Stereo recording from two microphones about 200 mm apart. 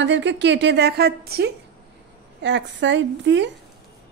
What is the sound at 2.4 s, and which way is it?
A woman's voice, 60° right (ahead or behind).